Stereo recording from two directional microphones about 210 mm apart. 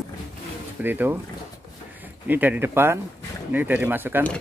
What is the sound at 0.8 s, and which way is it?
Speech, 10° right (ahead or behind).